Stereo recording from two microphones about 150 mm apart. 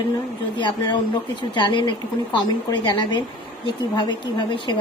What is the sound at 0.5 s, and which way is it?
A woman's voice, 30° left (ahead or behind).